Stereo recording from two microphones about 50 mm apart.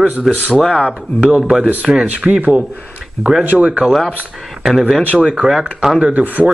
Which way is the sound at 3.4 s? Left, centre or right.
Right.